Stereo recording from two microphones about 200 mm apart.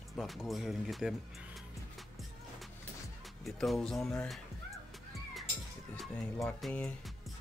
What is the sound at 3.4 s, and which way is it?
Speech, centre (ahead or behind).